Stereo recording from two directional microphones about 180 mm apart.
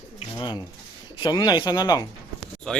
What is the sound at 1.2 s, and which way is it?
Speech, 25° left (ahead or behind).